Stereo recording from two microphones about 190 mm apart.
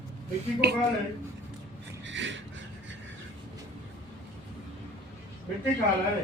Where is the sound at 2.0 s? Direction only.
75° right (ahead or behind).